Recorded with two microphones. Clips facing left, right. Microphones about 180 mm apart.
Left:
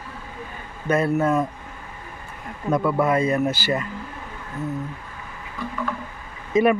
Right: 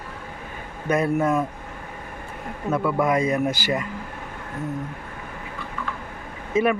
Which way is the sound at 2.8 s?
10° right (ahead or behind).